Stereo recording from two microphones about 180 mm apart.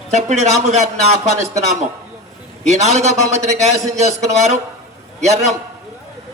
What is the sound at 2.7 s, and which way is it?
A man's voice, 40° right (ahead or behind).